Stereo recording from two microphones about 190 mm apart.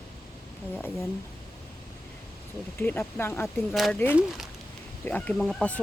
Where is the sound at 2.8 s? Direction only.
10° left (ahead or behind).